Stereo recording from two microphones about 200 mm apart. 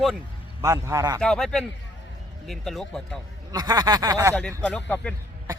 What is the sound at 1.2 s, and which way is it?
Speech, 5° left (ahead or behind).